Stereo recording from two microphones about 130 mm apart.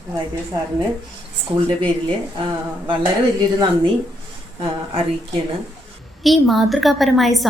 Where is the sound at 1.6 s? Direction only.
40° right (ahead or behind).